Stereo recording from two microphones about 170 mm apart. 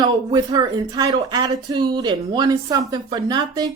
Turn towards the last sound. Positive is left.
turn(degrees=-25)  # may be behind; listen again after turning